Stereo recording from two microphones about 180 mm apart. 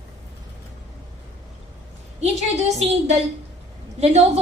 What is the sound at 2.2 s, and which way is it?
A woman's voice, 40° right (ahead or behind).